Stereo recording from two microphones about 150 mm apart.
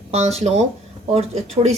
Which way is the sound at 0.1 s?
45° right (ahead or behind).